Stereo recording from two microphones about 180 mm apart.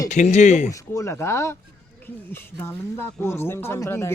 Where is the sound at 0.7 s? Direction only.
15° left (ahead or behind).